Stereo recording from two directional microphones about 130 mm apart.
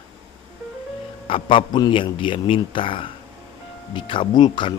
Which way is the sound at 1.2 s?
40° left (ahead or behind).